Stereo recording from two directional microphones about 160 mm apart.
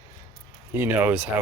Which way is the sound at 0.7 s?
15° right (ahead or behind).